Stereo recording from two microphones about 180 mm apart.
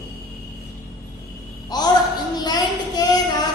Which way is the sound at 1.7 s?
20° left (ahead or behind).